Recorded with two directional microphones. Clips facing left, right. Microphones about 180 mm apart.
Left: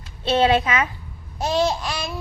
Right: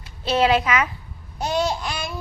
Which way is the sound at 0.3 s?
25° left (ahead or behind).